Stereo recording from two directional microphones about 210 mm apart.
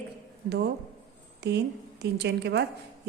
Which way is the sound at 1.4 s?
55° right (ahead or behind).